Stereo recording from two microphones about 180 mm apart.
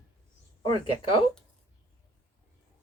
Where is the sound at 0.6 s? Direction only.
25° left (ahead or behind).